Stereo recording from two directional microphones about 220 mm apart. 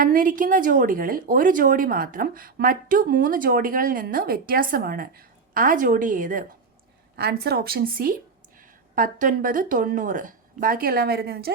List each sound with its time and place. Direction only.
0.0 s a woman's voice: 40° right (ahead or behind)